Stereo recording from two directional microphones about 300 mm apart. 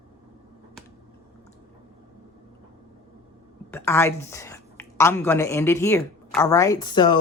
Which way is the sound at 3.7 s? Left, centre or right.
Centre.